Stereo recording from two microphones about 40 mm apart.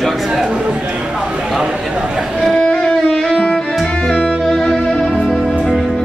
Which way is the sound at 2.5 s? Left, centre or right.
Left.